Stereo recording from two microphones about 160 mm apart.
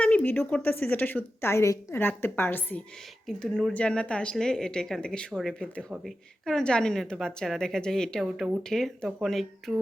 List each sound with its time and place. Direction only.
0.0 s a woman's voice: 10° left (ahead or behind)